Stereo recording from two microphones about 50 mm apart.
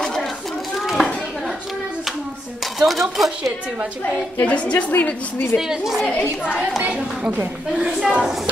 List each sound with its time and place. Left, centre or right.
0.0 s children playing: centre
0.7 s a sound: centre
2.8 s speech: centre
4.4 s a woman's voice: left
5.6 s a woman's voice: centre
7.3 s a woman's voice: centre